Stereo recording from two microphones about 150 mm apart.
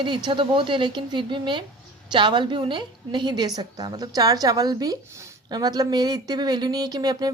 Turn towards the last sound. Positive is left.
turn(degrees=-25)  # may be behind; listen again after turning